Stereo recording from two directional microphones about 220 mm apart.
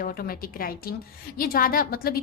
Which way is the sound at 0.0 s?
40° left (ahead or behind).